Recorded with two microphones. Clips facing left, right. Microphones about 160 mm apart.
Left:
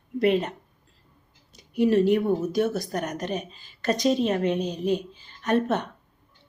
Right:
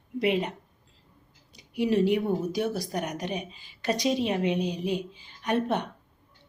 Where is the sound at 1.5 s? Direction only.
50° left (ahead or behind).